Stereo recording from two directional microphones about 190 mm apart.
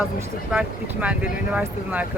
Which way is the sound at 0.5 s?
Centre (ahead or behind).